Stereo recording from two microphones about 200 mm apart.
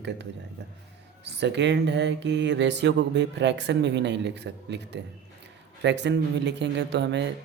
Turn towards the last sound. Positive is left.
turn(degrees=-60)  # may be behind; listen again after turning